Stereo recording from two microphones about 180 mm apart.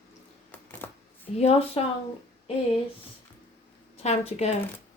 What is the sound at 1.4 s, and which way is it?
Speech, 35° left (ahead or behind).